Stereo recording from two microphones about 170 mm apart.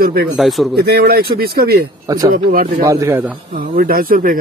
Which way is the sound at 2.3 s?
55° right (ahead or behind).